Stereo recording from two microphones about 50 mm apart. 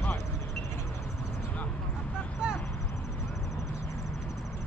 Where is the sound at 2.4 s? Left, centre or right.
Centre.